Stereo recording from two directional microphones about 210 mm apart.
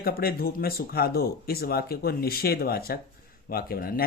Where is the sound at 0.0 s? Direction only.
45° left (ahead or behind).